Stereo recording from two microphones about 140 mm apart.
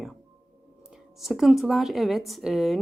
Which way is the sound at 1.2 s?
Centre (ahead or behind).